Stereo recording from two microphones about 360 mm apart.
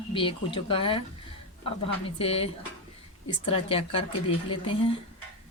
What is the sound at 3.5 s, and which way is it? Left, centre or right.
Speech, centre.